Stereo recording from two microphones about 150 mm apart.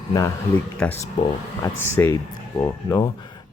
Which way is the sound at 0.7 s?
15° left (ahead or behind).